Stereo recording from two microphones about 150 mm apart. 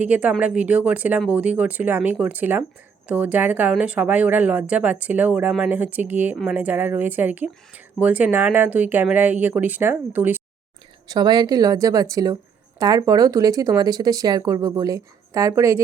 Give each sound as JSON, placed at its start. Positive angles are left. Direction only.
{"t": 0.0, "sound": "a woman's voice", "side_deg": -10}
{"t": 11.1, "sound": "speech", "side_deg": -25}